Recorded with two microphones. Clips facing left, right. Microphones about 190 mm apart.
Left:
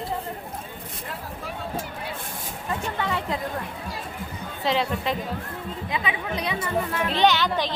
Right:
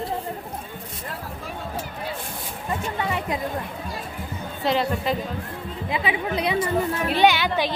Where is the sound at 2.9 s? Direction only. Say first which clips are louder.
Right 1 dB; 20° right (ahead or behind).